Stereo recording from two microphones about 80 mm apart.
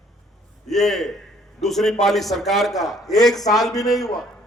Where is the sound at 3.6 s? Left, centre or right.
Centre.